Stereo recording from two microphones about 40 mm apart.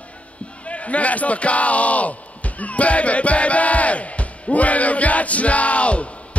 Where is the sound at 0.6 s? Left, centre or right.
Left.